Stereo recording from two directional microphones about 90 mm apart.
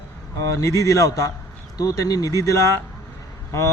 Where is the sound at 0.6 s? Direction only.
35° left (ahead or behind).